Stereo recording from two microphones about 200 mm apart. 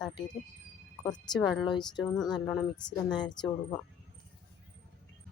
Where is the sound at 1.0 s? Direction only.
20° left (ahead or behind).